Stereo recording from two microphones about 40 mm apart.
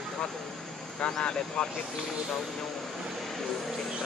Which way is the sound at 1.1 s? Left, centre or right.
Left.